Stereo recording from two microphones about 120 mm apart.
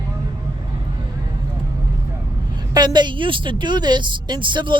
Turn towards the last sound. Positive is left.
turn(degrees=-40)  # may be behind; listen again after turning